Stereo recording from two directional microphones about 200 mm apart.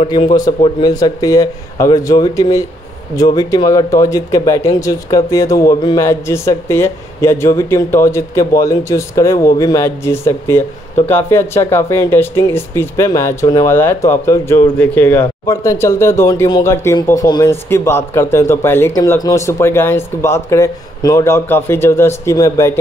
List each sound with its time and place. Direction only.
0.0 s speech: 25° left (ahead or behind)